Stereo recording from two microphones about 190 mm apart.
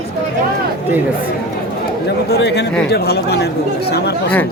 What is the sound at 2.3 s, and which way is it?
Speech, 60° left (ahead or behind).